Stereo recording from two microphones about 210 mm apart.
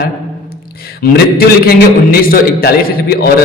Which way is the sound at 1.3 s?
45° left (ahead or behind).